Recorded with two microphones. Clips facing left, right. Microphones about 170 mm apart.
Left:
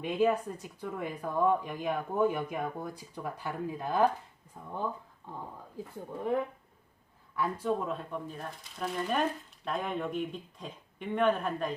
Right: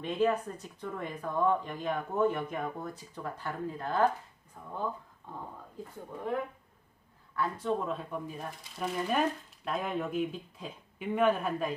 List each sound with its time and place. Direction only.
0.0 s speech: 10° left (ahead or behind)
7.3 s speech: 10° left (ahead or behind); by 11.7 s 5° right (ahead or behind)